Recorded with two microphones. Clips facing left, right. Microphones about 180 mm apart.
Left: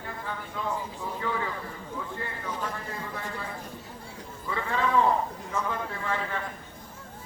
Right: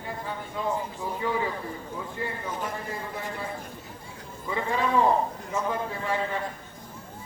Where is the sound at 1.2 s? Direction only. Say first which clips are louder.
Right 3 dB; 15° right (ahead or behind).